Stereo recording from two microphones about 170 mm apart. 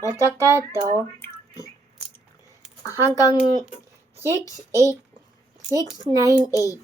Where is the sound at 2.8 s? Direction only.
20° left (ahead or behind).